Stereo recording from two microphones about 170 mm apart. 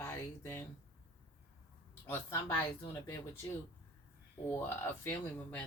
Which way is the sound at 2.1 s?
15° left (ahead or behind).